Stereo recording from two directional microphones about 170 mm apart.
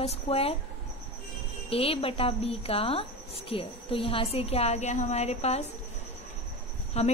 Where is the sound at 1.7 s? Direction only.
35° left (ahead or behind).